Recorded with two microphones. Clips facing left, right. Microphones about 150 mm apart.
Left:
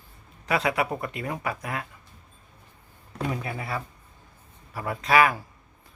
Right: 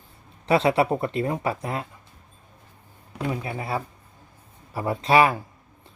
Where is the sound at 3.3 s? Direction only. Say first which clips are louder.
Right 3 dB; 25° right (ahead or behind).